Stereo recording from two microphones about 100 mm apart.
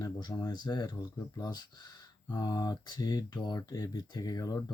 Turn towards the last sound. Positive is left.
turn(degrees=35)  # may be behind; listen again after turning